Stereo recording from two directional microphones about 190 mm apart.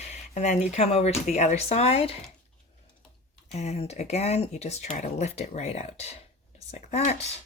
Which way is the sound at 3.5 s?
35° left (ahead or behind).